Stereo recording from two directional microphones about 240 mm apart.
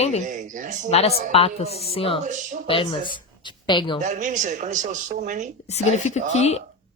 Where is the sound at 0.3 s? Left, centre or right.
Right.